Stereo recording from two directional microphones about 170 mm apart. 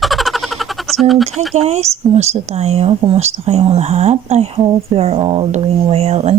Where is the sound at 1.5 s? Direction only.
40° right (ahead or behind).